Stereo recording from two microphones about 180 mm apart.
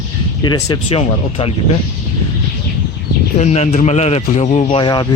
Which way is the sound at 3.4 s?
35° left (ahead or behind).